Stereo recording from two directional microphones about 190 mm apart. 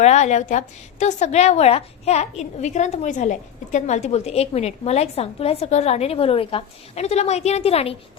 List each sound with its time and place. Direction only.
0.0 s a woman's voice: 35° left (ahead or behind)